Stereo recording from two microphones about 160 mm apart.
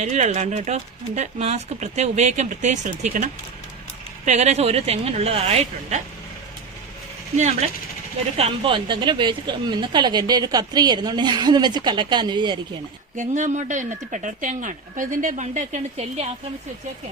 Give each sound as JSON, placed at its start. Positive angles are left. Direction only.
{"t": 0.0, "sound": "speech", "side_deg": -45}
{"t": 4.3, "sound": "speech", "side_deg": -45}
{"t": 7.3, "sound": "speech", "side_deg": -45}
{"t": 8.4, "sound": "speech", "side_deg": -30}
{"t": 13.1, "sound": "speech", "side_deg": -50}